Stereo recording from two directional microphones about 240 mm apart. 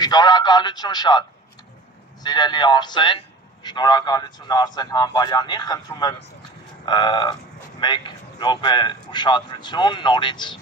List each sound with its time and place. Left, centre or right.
0.0 s a man's voice: centre
2.2 s a man's voice: centre